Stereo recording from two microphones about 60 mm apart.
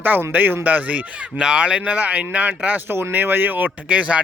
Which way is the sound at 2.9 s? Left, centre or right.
Right.